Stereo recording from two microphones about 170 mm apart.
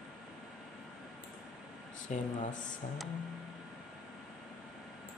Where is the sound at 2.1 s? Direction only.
45° left (ahead or behind).